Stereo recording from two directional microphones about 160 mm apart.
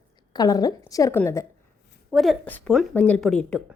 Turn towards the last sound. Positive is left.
turn(degrees=5)  # may be behind; listen again after turning